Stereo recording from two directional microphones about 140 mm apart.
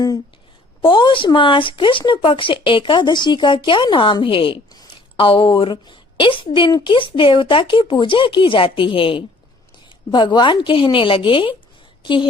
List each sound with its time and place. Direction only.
0.8 s a woman's voice: 35° left (ahead or behind)